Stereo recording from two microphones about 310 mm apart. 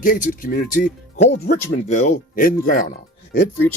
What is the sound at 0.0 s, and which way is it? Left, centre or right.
Speech, left.